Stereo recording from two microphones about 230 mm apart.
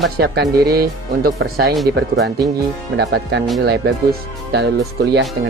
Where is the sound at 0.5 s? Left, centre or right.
Right.